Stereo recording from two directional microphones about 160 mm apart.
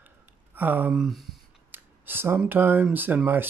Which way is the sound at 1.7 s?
15° right (ahead or behind).